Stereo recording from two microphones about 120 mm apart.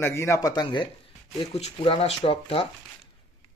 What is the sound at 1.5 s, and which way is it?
Speech, 55° left (ahead or behind).